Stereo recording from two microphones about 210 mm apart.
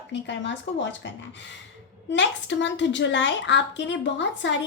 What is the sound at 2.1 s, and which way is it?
A woman's voice, 60° left (ahead or behind).